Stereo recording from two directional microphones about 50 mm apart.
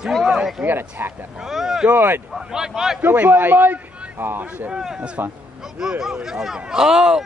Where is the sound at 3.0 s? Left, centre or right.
Right.